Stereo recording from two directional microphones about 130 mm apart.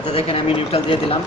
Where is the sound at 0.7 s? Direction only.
45° left (ahead or behind).